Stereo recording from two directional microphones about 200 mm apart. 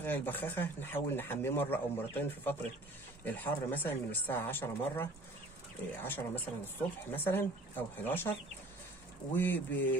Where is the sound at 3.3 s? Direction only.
10° left (ahead or behind).